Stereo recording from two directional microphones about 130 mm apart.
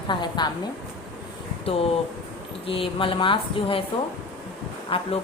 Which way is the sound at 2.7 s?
45° left (ahead or behind).